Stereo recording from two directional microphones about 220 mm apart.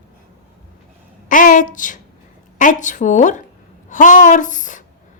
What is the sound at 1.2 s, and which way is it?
A woman's voice, 35° left (ahead or behind).